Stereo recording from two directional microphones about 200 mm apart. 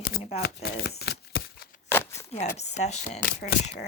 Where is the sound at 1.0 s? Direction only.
55° left (ahead or behind).